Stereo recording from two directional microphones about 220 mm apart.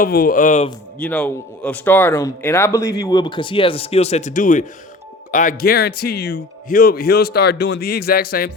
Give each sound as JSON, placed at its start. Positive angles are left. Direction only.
{"t": 0.0, "sound": "speech", "side_deg": 40}
{"t": 0.9, "sound": "speech", "side_deg": 5}